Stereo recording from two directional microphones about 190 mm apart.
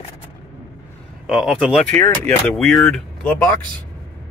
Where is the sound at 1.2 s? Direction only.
Centre (ahead or behind).